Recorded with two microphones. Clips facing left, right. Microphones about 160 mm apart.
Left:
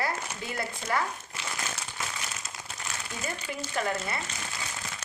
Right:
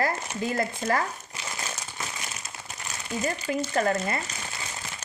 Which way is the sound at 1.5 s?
10° right (ahead or behind).